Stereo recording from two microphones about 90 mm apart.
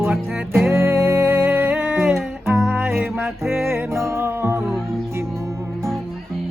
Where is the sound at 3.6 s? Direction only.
25° right (ahead or behind).